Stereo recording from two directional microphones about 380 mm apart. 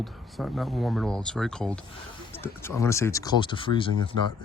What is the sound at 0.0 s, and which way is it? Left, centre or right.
Speech, centre.